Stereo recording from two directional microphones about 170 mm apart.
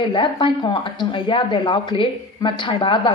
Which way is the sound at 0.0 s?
30° left (ahead or behind).